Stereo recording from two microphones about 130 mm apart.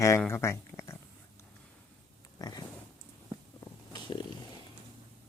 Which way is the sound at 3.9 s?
30° left (ahead or behind).